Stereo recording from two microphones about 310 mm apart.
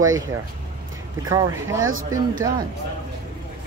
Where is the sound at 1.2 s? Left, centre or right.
Centre.